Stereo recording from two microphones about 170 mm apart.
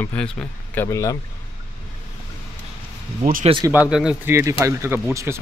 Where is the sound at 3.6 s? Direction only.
10° right (ahead or behind).